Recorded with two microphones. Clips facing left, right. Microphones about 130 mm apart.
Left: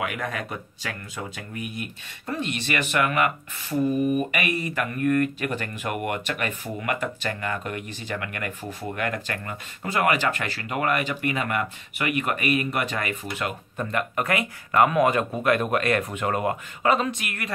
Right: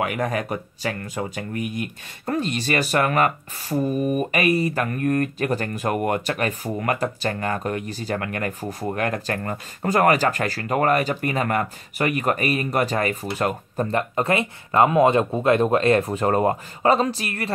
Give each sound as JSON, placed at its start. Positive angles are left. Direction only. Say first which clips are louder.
{"t": 0.0, "sound": "speech", "louder": "right 5 dB", "side_deg": -45}
{"t": 2.2, "sound": "speech", "louder": "right 5 dB", "side_deg": -40}